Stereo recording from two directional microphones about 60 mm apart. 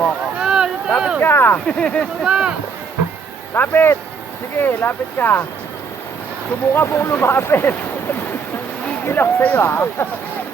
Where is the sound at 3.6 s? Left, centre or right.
Left.